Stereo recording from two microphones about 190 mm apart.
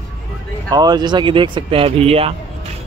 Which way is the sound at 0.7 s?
20° right (ahead or behind).